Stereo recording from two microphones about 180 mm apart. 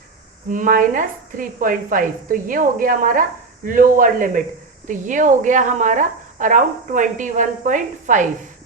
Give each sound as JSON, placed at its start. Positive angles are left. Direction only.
{"t": 0.4, "sound": "a woman's voice", "side_deg": -45}